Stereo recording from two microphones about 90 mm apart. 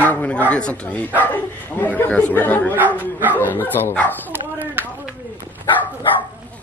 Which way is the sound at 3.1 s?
20° right (ahead or behind).